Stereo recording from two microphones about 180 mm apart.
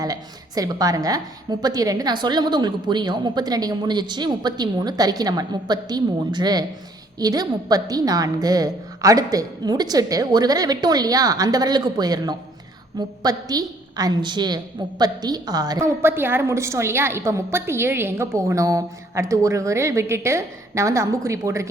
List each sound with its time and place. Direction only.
0.0 s a woman's voice: 20° right (ahead or behind)